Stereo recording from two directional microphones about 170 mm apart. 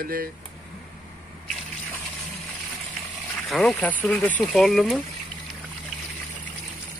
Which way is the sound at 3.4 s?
5° left (ahead or behind).